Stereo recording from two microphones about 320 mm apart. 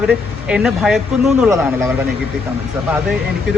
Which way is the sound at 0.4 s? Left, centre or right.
Centre.